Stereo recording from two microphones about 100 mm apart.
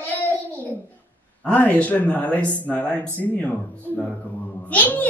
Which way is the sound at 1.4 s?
15° left (ahead or behind).